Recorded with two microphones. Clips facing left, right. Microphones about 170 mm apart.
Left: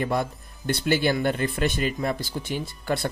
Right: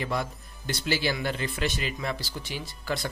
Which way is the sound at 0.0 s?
55° left (ahead or behind).